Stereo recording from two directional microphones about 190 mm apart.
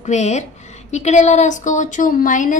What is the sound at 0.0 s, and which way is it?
A woman's voice, 35° left (ahead or behind).